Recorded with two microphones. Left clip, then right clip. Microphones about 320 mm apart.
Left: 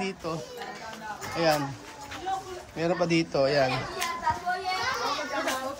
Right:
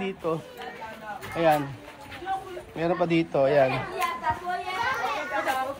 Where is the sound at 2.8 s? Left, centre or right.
Centre.